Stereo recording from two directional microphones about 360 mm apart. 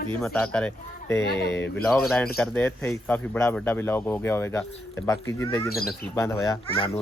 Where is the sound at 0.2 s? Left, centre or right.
Centre.